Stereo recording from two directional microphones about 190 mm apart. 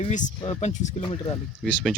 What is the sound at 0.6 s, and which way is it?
Speech, 40° left (ahead or behind).